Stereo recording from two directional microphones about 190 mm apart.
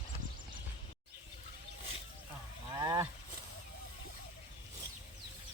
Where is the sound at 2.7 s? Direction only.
20° right (ahead or behind).